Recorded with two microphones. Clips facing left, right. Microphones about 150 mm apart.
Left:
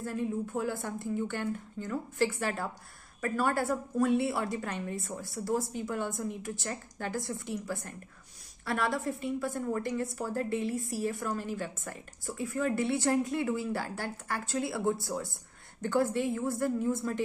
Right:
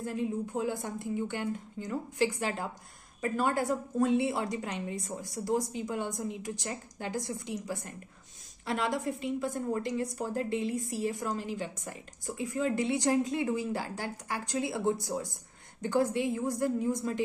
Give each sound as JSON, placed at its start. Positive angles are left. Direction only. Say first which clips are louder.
{"t": 0.0, "sound": "a woman's voice", "louder": "even", "side_deg": -20}